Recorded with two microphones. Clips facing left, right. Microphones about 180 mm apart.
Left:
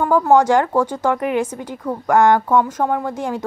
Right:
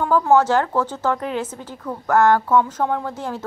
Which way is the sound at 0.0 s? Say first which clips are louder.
Left 2 dB; 10° left (ahead or behind).